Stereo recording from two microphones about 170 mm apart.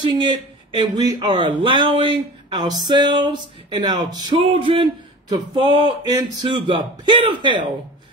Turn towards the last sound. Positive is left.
turn(degrees=-30)  # may be behind; listen again after turning